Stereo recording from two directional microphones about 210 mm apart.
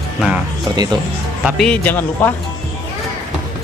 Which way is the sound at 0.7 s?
20° right (ahead or behind).